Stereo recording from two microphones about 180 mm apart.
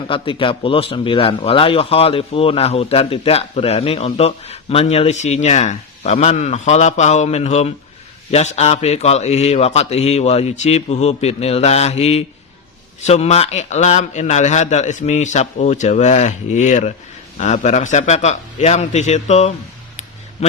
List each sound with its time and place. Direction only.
0.1 s a man's voice: 30° left (ahead or behind)